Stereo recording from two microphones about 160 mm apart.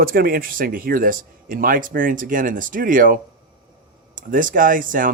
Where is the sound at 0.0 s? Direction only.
65° right (ahead or behind).